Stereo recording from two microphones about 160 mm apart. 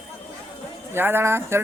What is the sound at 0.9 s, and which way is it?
Speech, 15° right (ahead or behind).